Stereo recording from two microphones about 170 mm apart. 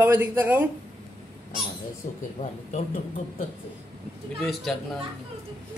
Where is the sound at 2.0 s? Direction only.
55° left (ahead or behind).